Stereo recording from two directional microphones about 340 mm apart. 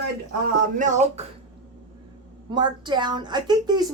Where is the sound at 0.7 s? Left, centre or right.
Right.